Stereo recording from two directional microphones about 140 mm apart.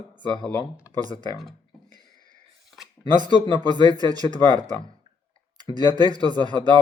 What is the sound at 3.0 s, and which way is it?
Speech, 30° right (ahead or behind).